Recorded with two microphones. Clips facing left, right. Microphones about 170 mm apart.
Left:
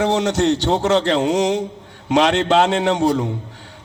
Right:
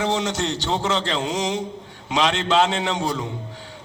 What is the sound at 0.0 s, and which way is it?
A man's voice, 60° left (ahead or behind).